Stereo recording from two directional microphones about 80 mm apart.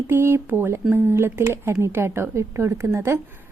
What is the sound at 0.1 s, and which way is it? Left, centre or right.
Speech, right.